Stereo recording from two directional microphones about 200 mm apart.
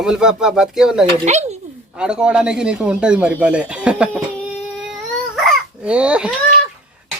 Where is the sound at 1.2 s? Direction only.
35° right (ahead or behind).